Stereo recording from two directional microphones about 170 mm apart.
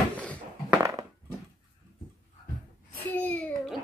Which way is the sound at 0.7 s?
15° right (ahead or behind).